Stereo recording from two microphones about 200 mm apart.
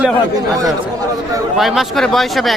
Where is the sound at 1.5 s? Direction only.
Centre (ahead or behind).